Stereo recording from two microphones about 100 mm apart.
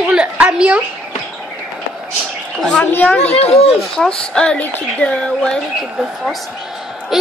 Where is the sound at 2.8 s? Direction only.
20° left (ahead or behind).